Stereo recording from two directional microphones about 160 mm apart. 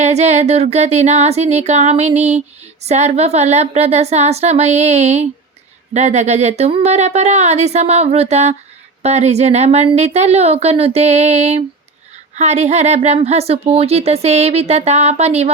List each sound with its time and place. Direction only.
0.0 s speech: 45° right (ahead or behind)